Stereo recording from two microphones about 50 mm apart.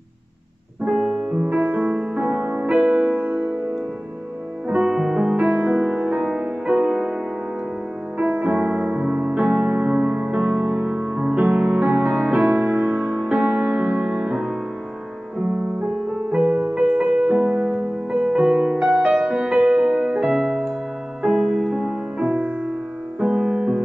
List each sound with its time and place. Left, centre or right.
0.8 s music: centre
1.5 s music: right
2.2 s music: right
2.6 s music: right
4.8 s music: centre
5.3 s music: right
8.2 s music: right
11.8 s music: right
16.3 s music: centre
20.4 s music: centre
22.2 s music: right